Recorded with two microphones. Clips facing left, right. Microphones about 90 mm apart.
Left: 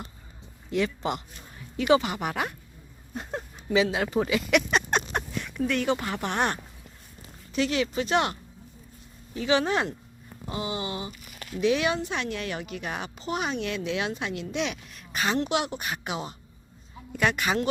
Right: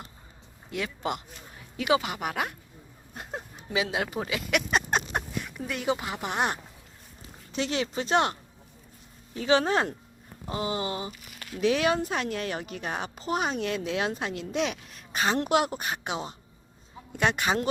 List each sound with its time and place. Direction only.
0.7 s speech: 5° right (ahead or behind)
7.5 s a woman's voice: 30° right (ahead or behind)
9.4 s a woman's voice: 35° right (ahead or behind)
15.4 s a woman's voice: 45° right (ahead or behind)